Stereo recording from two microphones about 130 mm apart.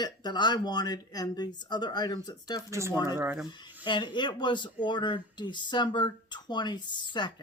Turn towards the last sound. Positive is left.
turn(degrees=35)  # may be behind; listen again after turning